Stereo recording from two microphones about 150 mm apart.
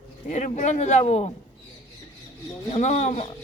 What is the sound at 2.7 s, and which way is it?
Speech, 50° left (ahead or behind).